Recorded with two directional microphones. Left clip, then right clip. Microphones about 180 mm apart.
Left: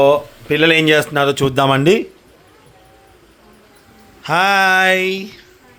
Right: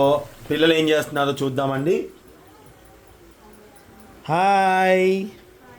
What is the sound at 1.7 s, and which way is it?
Speech, 40° left (ahead or behind).